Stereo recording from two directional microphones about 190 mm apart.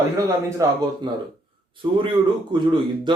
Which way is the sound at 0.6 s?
20° right (ahead or behind).